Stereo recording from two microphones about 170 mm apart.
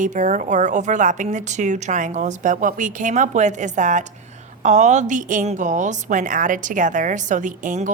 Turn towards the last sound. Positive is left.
turn(degrees=-50)  # may be behind; listen again after turning